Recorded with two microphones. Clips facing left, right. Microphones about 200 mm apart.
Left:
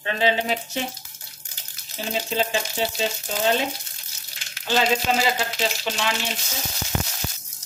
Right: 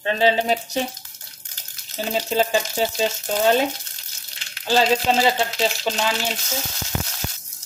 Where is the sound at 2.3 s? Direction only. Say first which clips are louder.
Right 5 dB; 40° right (ahead or behind).